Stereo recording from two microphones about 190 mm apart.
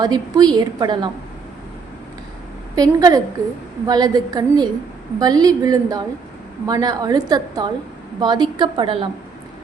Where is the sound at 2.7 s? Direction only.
20° right (ahead or behind).